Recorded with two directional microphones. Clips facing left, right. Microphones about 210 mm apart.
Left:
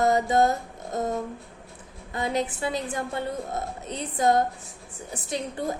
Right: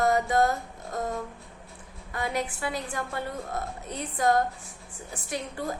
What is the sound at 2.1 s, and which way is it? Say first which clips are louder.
A woman's voice: left 3 dB; 20° left (ahead or behind).